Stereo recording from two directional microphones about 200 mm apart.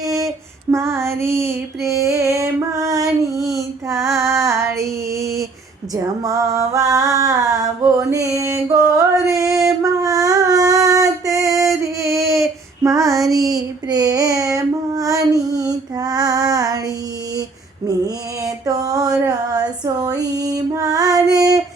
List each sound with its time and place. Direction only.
0.0 s female singing: 15° right (ahead or behind)
5.9 s a sound: 15° right (ahead or behind)
11.8 s female singing: 15° right (ahead or behind)
17.8 s mantra: 15° right (ahead or behind)
19.3 s a sound: 20° right (ahead or behind)
20.1 s female singing: 20° right (ahead or behind)